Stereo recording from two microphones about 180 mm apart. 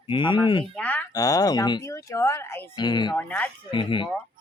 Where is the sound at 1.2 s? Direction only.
20° left (ahead or behind).